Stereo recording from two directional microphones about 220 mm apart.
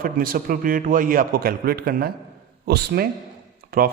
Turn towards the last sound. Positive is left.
turn(degrees=-40)  # may be behind; listen again after turning